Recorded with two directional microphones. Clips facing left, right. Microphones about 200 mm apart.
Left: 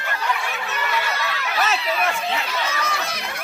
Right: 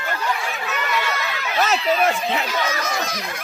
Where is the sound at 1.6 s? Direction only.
40° right (ahead or behind).